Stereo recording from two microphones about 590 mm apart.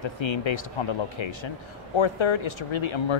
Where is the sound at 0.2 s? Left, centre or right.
Left.